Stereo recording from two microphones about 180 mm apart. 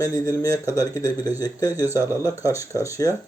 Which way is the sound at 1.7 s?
15° right (ahead or behind).